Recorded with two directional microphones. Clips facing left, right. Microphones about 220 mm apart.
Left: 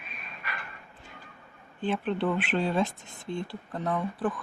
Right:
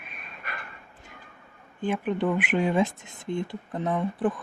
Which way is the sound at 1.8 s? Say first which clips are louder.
Right 2 dB; 15° right (ahead or behind).